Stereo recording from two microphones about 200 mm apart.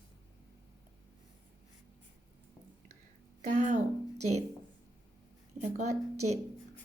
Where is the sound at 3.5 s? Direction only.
40° right (ahead or behind).